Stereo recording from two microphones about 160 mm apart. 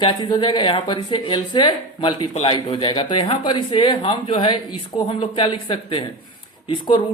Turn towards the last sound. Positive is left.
turn(degrees=30)  # may be behind; listen again after turning